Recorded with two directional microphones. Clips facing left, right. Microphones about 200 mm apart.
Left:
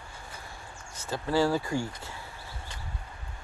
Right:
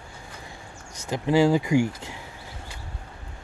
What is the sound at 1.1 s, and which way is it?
Speech, 15° right (ahead or behind).